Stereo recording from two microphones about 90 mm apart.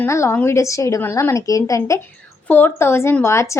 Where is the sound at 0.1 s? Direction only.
30° left (ahead or behind).